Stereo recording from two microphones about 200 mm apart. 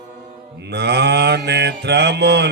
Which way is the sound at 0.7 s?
55° right (ahead or behind).